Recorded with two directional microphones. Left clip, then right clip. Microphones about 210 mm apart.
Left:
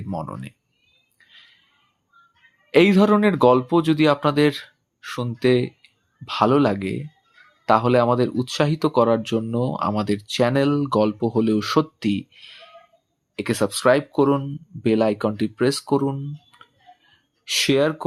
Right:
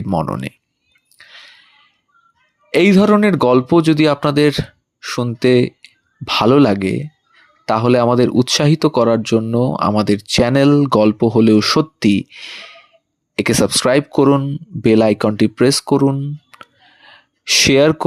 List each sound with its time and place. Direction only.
0.1 s speech: 30° right (ahead or behind)
1.2 s a sound: 25° right (ahead or behind)
2.7 s speech: 25° right (ahead or behind)